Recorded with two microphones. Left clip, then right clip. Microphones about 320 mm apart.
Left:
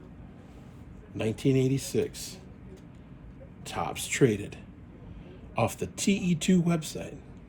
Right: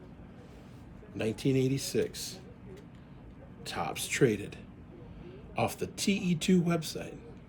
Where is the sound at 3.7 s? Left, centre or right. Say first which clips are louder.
Left 2 dB; centre.